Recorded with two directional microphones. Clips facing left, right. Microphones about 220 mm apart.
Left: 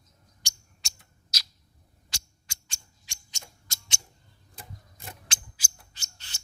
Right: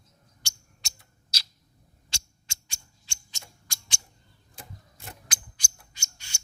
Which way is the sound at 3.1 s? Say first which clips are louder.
Left 1 dB; 20° left (ahead or behind).